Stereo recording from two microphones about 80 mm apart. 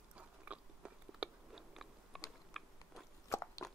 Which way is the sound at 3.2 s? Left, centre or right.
Left.